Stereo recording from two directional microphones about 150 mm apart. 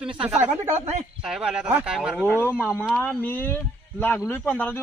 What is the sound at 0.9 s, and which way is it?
Speech, 45° right (ahead or behind).